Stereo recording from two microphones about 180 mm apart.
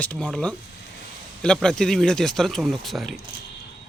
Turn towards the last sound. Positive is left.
turn(degrees=0)  # may be behind; listen again after turning